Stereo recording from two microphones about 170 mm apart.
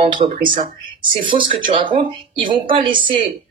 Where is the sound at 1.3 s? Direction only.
30° right (ahead or behind).